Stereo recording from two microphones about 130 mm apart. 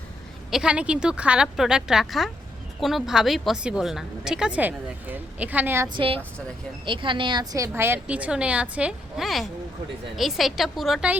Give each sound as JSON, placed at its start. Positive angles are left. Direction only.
{"t": 0.5, "sound": "a woman's voice", "side_deg": -5}
{"t": 5.9, "sound": "a woman's voice", "side_deg": -45}
{"t": 7.7, "sound": "a woman's voice", "side_deg": -15}